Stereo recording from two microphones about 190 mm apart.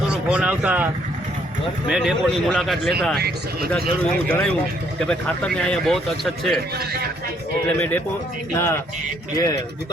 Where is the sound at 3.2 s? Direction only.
55° right (ahead or behind).